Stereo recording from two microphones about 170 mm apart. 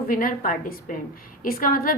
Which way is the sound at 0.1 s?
55° left (ahead or behind).